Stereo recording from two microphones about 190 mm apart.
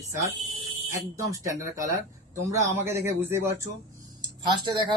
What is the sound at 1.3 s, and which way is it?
Speech, 15° right (ahead or behind).